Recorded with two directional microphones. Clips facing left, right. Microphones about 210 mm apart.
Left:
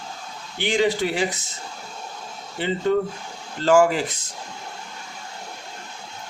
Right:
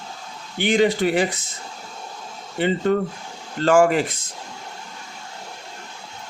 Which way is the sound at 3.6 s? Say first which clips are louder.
Right 1 dB; 55° right (ahead or behind).